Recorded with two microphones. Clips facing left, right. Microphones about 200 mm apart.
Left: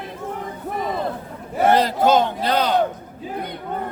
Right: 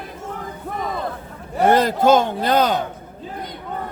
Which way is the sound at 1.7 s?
50° right (ahead or behind).